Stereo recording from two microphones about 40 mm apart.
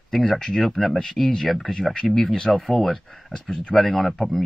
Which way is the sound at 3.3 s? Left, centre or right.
Centre.